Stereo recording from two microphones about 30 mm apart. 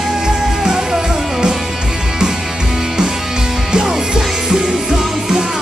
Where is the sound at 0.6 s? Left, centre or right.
Right.